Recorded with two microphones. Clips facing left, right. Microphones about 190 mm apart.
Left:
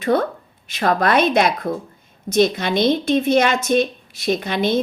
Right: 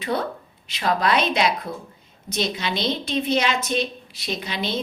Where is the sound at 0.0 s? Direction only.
50° left (ahead or behind).